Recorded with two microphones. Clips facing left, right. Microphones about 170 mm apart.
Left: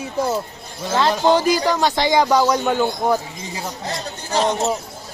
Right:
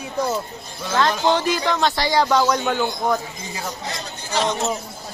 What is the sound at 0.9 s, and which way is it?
Speech, 10° left (ahead or behind).